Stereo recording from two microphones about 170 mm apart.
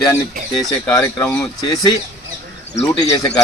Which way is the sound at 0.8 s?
20° left (ahead or behind).